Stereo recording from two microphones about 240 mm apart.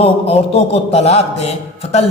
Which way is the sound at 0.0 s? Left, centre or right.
Left.